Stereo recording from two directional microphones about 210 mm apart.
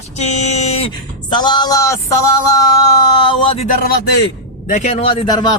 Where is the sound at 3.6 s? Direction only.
40° left (ahead or behind); by 5.4 s 25° left (ahead or behind).